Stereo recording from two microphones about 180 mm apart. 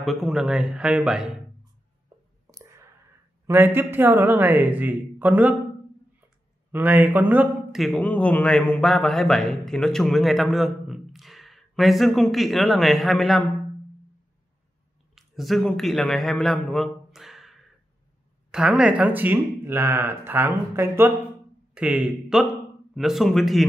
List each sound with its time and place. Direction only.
0.0 s speech: centre (ahead or behind)
2.4 s clicking: 15° right (ahead or behind)
3.4 s speech: 10° right (ahead or behind)
6.7 s speech: 10° right (ahead or behind)
15.1 s a man's voice: centre (ahead or behind)